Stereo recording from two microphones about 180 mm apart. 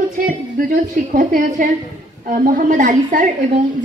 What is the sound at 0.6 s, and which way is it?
Speech, 50° right (ahead or behind).